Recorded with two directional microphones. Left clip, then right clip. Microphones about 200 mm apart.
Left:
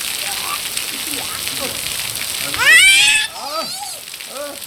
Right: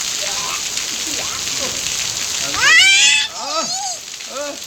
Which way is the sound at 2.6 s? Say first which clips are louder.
Left 1 dB; 10° right (ahead or behind).